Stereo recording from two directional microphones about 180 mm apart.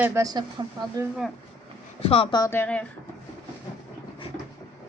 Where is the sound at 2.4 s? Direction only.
15° left (ahead or behind).